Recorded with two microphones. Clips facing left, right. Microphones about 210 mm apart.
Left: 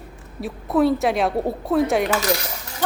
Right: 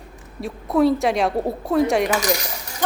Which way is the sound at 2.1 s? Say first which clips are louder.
Even; 15° right (ahead or behind).